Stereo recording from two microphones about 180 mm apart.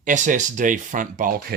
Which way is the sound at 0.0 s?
45° right (ahead or behind).